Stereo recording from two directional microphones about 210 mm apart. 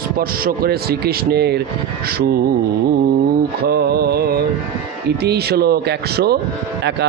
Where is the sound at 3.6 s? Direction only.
50° right (ahead or behind).